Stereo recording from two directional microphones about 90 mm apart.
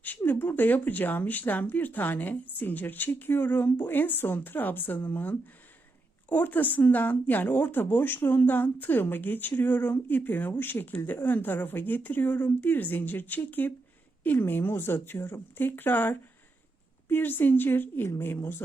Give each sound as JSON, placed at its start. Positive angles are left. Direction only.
{"t": 0.0, "sound": "speech", "side_deg": 20}